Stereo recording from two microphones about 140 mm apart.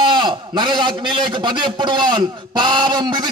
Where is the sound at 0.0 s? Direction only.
35° right (ahead or behind).